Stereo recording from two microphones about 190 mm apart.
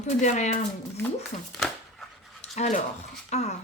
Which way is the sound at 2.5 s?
35° left (ahead or behind).